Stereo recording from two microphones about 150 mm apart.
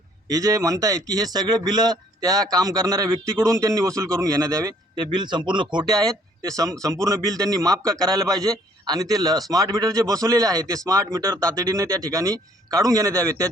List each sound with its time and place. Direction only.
0.3 s a man's voice: 25° right (ahead or behind)